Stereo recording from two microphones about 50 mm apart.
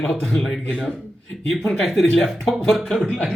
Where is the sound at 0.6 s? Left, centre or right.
Centre.